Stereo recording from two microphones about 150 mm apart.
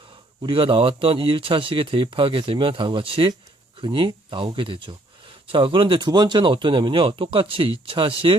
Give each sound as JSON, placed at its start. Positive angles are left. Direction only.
{"t": 0.4, "sound": "speech", "side_deg": -35}